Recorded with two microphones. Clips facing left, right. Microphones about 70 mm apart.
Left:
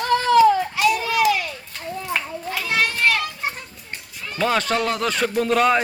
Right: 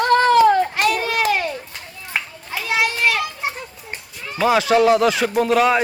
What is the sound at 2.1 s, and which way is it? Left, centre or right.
Children playing, centre.